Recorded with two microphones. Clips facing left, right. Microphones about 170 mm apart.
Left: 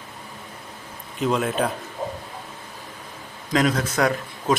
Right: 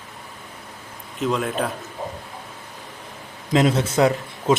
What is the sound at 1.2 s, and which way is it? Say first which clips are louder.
Speech: left 1 dB; centre (ahead or behind).